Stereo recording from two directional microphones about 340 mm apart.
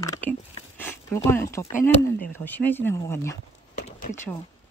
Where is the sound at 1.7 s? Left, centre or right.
Left.